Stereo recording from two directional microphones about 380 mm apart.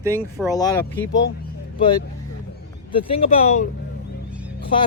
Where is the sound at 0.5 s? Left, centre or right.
Centre.